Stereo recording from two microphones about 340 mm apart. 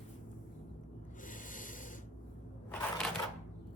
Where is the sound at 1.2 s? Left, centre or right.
Left.